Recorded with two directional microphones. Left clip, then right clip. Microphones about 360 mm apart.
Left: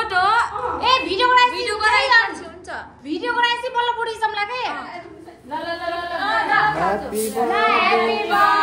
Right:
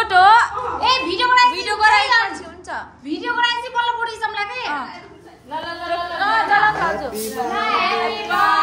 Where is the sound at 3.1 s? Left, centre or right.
Centre.